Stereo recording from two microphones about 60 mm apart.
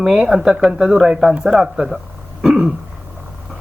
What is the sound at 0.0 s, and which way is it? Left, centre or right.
Speech, centre.